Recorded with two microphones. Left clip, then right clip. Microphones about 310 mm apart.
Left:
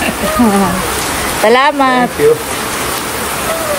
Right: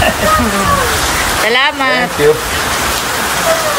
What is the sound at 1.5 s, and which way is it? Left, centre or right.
Speech, centre.